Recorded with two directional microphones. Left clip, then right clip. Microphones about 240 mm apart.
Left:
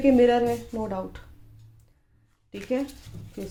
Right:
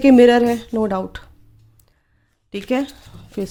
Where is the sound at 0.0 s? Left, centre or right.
Right.